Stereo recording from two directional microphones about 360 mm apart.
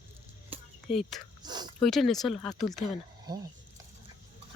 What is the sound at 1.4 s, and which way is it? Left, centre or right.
Speech, centre.